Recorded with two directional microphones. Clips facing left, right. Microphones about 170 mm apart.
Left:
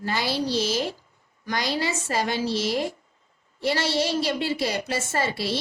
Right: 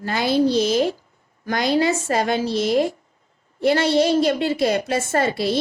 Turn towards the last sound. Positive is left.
turn(degrees=-55)  # may be behind; listen again after turning